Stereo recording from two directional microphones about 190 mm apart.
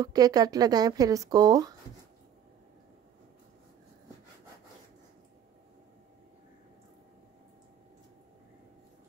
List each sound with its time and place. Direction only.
0.0 s speech: 20° right (ahead or behind)